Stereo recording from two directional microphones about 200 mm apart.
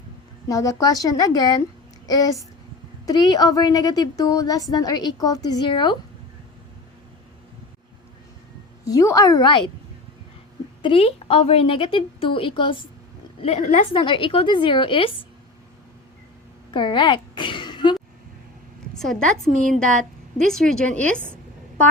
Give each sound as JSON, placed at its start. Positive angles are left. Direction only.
{"t": 0.4, "sound": "a woman's voice", "side_deg": 15}
{"t": 8.8, "sound": "speech", "side_deg": 15}
{"t": 10.8, "sound": "a woman's voice", "side_deg": 30}
{"t": 14.0, "sound": "a woman's voice", "side_deg": 25}
{"t": 16.7, "sound": "a sound", "side_deg": 25}
{"t": 18.9, "sound": "a woman's voice", "side_deg": 0}